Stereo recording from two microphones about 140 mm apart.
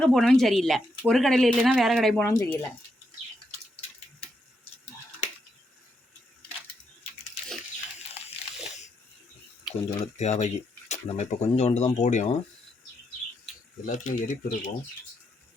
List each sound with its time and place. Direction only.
0.0 s speech: 5° left (ahead or behind)
2.2 s speech: 20° left (ahead or behind)
9.7 s water: 5° right (ahead or behind)
10.0 s speech: 50° left (ahead or behind)
13.8 s speech: 65° left (ahead or behind)